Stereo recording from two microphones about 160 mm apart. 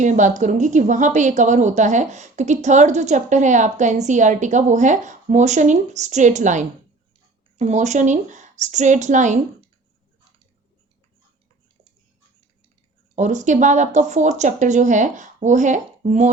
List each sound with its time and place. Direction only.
0.0 s a woman's voice: 50° right (ahead or behind)
13.1 s a woman's voice: 50° right (ahead or behind)